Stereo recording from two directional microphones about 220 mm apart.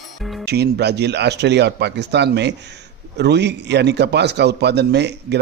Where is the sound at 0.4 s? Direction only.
50° right (ahead or behind).